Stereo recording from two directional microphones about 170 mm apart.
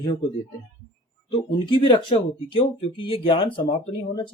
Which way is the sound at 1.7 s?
30° left (ahead or behind).